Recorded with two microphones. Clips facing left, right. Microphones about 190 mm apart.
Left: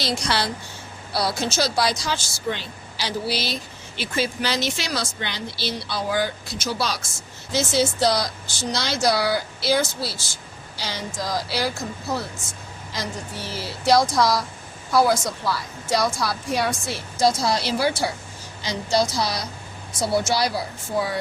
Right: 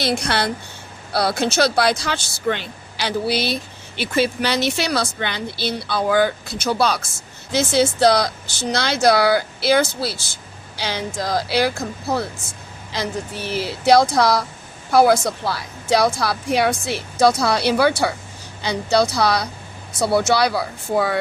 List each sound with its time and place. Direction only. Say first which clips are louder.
0.0 s speech: right 4 dB; 55° right (ahead or behind)
13.8 s speech: right 4 dB; 60° right (ahead or behind)